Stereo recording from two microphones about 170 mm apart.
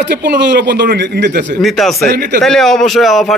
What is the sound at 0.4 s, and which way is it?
Speech, 90° right.